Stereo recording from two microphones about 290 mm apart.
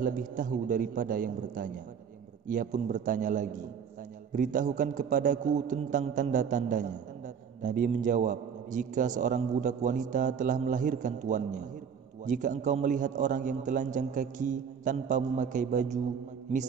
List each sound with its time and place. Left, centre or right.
0.0 s a man's voice: right